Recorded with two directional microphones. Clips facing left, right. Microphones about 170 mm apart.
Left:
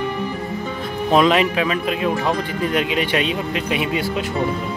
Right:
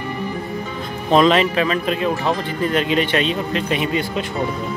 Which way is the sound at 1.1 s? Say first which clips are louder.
Right 1 dB; 10° left (ahead or behind).